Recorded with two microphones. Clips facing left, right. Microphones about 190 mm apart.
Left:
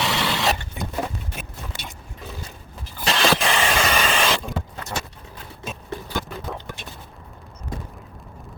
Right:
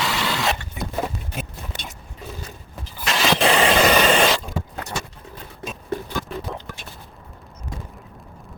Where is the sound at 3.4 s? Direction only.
40° right (ahead or behind).